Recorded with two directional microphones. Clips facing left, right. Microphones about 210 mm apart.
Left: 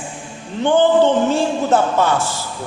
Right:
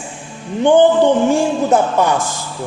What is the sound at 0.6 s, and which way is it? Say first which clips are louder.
A man's voice: right 3 dB; 15° right (ahead or behind).